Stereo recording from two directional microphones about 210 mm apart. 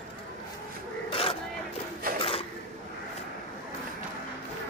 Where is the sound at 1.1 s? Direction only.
25° left (ahead or behind).